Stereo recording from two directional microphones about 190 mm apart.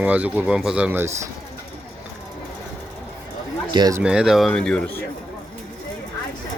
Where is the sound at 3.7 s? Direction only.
20° right (ahead or behind).